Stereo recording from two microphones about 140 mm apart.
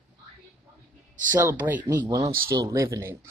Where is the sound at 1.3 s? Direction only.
25° right (ahead or behind).